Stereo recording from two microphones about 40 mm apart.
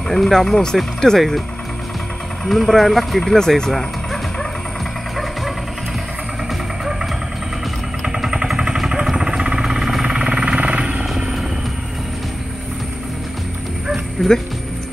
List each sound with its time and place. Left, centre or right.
0.1 s speech: centre
2.4 s speech: centre
6.8 s vehicle: centre
10.0 s jackhammer: right
14.2 s speech: centre